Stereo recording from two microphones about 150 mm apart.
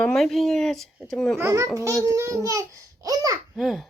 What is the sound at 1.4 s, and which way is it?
A child's voice, 20° right (ahead or behind).